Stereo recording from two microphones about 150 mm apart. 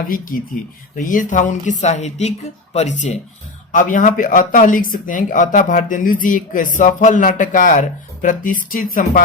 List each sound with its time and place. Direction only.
0.1 s speech: 65° left (ahead or behind)